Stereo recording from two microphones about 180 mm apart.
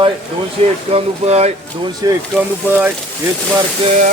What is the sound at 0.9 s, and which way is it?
Speech, 35° right (ahead or behind).